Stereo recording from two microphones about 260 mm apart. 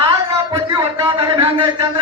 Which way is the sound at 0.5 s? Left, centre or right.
Centre.